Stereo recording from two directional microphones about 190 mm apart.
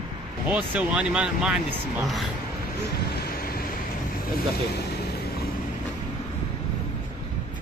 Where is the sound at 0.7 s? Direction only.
5° right (ahead or behind).